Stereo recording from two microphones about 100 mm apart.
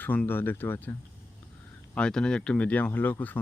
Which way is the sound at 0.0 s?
20° left (ahead or behind).